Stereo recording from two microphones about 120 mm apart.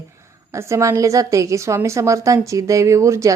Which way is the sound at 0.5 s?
25° right (ahead or behind).